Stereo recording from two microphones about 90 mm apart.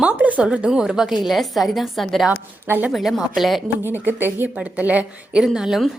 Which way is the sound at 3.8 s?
25° right (ahead or behind).